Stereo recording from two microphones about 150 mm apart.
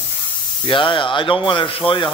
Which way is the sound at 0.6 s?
35° left (ahead or behind).